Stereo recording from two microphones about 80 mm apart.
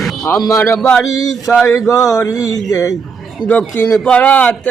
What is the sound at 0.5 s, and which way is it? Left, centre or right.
Speech, left.